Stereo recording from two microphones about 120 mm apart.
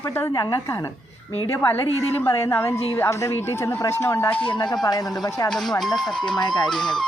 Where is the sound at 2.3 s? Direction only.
20° left (ahead or behind).